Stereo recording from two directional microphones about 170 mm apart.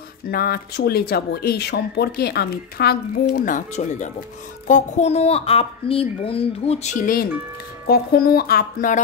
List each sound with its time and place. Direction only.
0.3 s speech: 65° left (ahead or behind)
3.3 s a woman's voice: 45° left (ahead or behind)
7.8 s speech: 65° left (ahead or behind)